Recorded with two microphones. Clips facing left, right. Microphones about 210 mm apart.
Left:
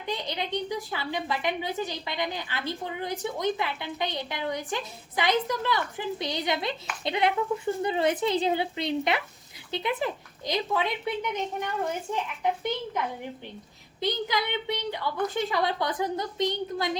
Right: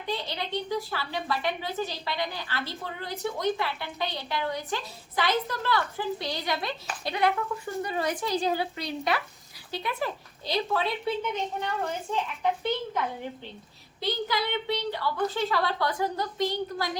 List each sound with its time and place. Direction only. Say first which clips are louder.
0.0 s a woman's voice: left 1 dB; 20° left (ahead or behind)
14.0 s a woman's voice: left 1 dB; 20° left (ahead or behind)